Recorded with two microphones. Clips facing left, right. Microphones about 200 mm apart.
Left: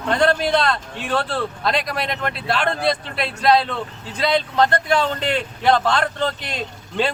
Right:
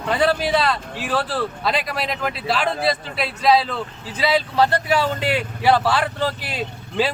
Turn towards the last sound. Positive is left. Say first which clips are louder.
# right 1 dB
turn(degrees=-5)  # may be behind; listen again after turning